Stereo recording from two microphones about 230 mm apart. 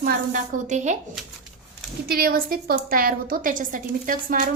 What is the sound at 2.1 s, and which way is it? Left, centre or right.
A woman's voice, right.